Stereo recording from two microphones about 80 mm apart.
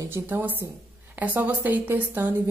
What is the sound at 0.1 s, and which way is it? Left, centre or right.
A woman's voice, right.